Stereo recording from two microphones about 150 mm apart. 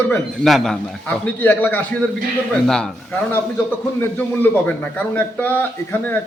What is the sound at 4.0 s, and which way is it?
A man's voice, 10° left (ahead or behind).